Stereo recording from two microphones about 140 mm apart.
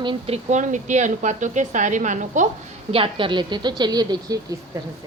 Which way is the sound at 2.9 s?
35° right (ahead or behind).